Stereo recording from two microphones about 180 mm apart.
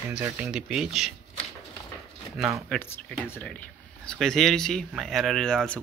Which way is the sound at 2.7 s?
10° left (ahead or behind).